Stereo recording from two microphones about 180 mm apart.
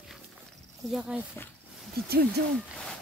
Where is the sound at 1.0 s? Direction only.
5° right (ahead or behind).